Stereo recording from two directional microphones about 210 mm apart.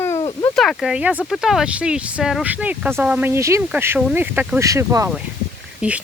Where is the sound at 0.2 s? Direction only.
20° left (ahead or behind).